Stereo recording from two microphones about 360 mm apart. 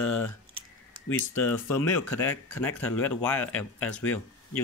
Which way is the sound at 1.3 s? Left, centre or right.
Centre.